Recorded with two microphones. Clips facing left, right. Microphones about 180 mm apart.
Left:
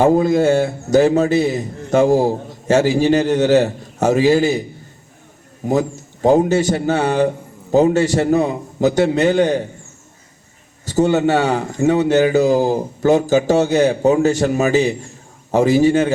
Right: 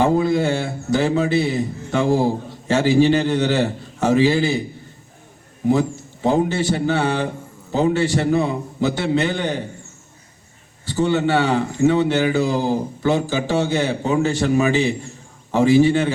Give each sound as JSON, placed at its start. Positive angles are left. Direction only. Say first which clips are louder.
{"t": 0.0, "sound": "a man's voice", "louder": "left 4 dB", "side_deg": 45}
{"t": 6.2, "sound": "a man's voice", "louder": "left 5 dB", "side_deg": 40}
{"t": 10.8, "sound": "a man's voice", "louder": "left 4 dB", "side_deg": 40}